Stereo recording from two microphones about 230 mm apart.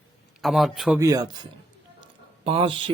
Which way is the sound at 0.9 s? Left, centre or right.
Centre.